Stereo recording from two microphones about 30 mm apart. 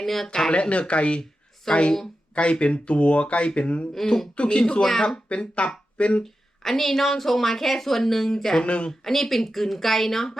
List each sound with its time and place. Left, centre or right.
0.0 s a woman's voice: centre
0.5 s speech: left
1.7 s speech: centre
2.3 s speech: left
4.8 s a woman's voice: centre
5.4 s speech: left
6.2 s a woman's voice: centre
8.6 s speech: left
8.9 s a woman's voice: centre